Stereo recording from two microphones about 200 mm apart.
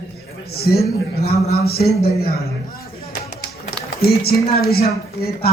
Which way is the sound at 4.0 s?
50° left (ahead or behind).